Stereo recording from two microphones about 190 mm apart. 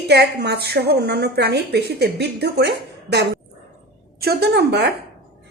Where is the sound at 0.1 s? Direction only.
60° right (ahead or behind).